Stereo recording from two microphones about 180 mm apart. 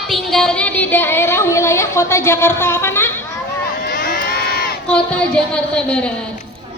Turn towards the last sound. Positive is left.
turn(degrees=5)  # may be behind; listen again after turning